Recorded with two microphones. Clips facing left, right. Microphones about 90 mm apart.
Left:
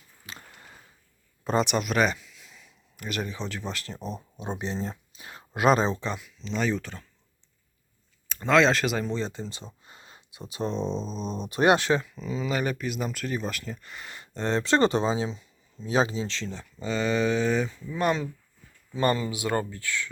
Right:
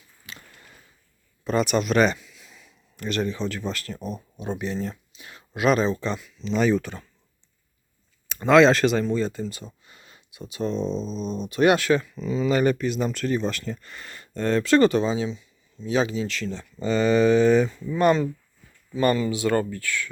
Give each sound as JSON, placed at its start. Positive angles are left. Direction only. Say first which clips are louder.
{"t": 0.3, "sound": "a sound", "louder": "even", "side_deg": 35}
{"t": 1.6, "sound": "speech", "louder": "right 4 dB", "side_deg": 5}
{"t": 3.0, "sound": "speech", "louder": "right 6 dB", "side_deg": 10}
{"t": 6.0, "sound": "speech", "louder": "right 4 dB", "side_deg": 15}
{"t": 6.4, "sound": "speech", "louder": "right 7 dB", "side_deg": -5}
{"t": 8.3, "sound": "speech", "louder": "right 5 dB", "side_deg": -10}
{"t": 8.9, "sound": "speech", "louder": "right 6 dB", "side_deg": 10}
{"t": 9.1, "sound": "speech", "louder": "right 6 dB", "side_deg": 20}
{"t": 10.9, "sound": "speech", "louder": "right 3 dB", "side_deg": 0}
{"t": 11.4, "sound": "speech", "louder": "right 2 dB", "side_deg": 30}
{"t": 12.1, "sound": "speech", "louder": "right 6 dB", "side_deg": 5}
{"t": 16.7, "sound": "speech", "louder": "right 6 dB", "side_deg": 0}
{"t": 18.9, "sound": "speech", "louder": "right 4 dB", "side_deg": 25}